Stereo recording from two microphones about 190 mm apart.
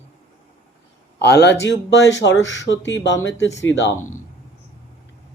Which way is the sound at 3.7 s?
80° left.